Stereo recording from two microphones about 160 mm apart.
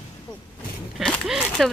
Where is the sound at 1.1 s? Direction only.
5° right (ahead or behind).